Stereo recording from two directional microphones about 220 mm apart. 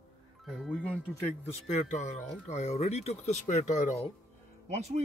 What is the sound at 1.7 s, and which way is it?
Speech, 35° left (ahead or behind).